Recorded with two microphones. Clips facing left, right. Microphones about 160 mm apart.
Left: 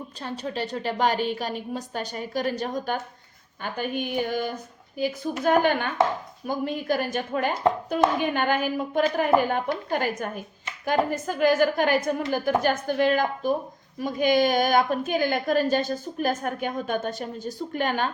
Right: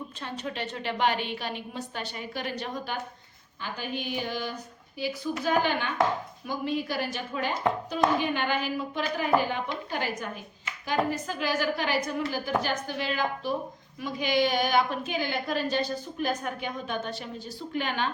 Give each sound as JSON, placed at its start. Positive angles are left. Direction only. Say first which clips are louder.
{"t": 0.2, "sound": "a woman's voice", "louder": "left 5 dB", "side_deg": 35}